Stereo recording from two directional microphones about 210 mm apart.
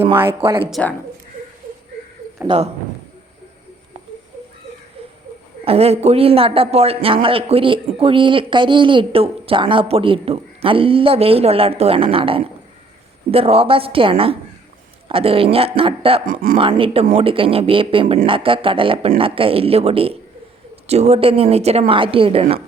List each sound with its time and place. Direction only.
0.4 s a man's voice: 25° right (ahead or behind)
0.7 s speech: 5° left (ahead or behind)
5.6 s a man's voice: 30° right (ahead or behind)
16.2 s speech: 40° right (ahead or behind)
16.6 s a man's voice: 25° right (ahead or behind)